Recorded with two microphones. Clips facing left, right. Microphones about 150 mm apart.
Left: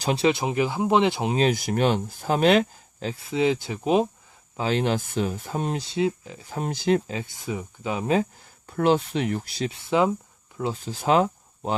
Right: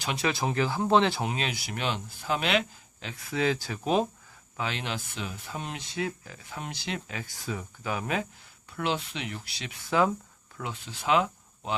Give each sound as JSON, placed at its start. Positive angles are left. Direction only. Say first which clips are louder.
{"t": 0.0, "sound": "speech", "louder": "left 8 dB", "side_deg": 35}
{"t": 0.3, "sound": "speech", "louder": "left 4 dB", "side_deg": 20}
{"t": 1.4, "sound": "speech", "louder": "left 11 dB", "side_deg": 45}
{"t": 4.5, "sound": "speech", "louder": "left 9 dB", "side_deg": 40}
{"t": 6.5, "sound": "speech", "louder": "left 13 dB", "side_deg": 45}
{"t": 7.1, "sound": "speech", "louder": "left 5 dB", "side_deg": 25}
{"t": 8.6, "sound": "speech", "louder": "left 10 dB", "side_deg": 45}
{"t": 9.6, "sound": "speech", "louder": "left 3 dB", "side_deg": 25}
{"t": 10.6, "sound": "speech", "louder": "left 9 dB", "side_deg": 35}